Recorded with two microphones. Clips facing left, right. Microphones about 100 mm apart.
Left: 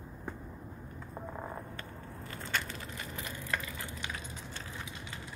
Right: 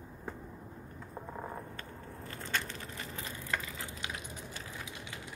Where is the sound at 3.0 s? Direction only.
30° right (ahead or behind).